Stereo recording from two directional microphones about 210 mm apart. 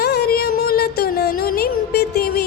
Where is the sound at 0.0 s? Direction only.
50° left (ahead or behind).